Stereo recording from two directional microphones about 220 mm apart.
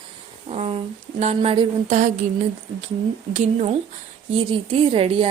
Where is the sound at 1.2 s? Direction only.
30° right (ahead or behind).